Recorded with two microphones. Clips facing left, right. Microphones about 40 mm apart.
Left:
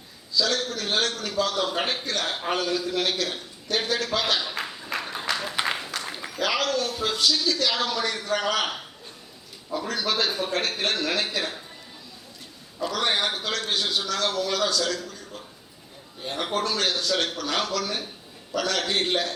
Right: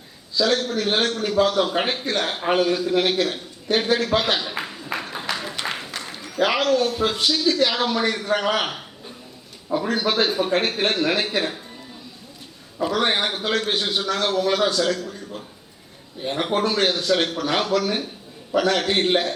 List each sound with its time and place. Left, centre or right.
0.3 s a man's voice: right
3.7 s speech: right
4.4 s a sound: centre
6.4 s speech: right
9.7 s speech: right
12.8 s speech: right
16.2 s speech: right